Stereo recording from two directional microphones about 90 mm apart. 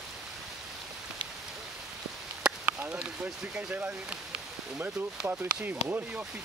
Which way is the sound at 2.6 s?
20° right (ahead or behind).